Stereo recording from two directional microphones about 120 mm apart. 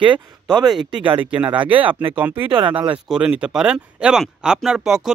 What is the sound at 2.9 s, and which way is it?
Speech, 5° right (ahead or behind).